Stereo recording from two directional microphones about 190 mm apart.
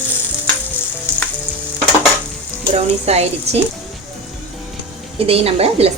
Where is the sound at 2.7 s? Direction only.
35° right (ahead or behind).